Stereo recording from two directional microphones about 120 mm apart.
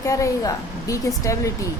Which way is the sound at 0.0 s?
25° left (ahead or behind).